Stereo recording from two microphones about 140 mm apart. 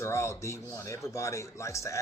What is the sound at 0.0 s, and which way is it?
Speech, 20° left (ahead or behind).